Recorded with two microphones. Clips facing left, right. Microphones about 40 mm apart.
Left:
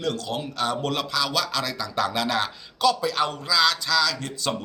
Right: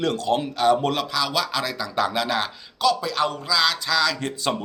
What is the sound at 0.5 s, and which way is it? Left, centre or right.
Speech, centre.